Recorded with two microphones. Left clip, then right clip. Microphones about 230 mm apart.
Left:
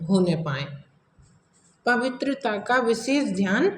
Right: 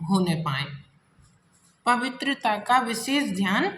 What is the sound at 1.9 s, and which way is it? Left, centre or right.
A woman's voice, right.